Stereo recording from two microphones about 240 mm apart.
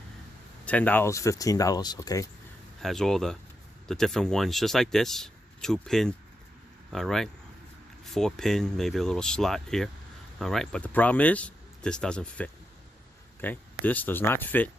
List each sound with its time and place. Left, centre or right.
0.6 s speech: centre
2.8 s speech: centre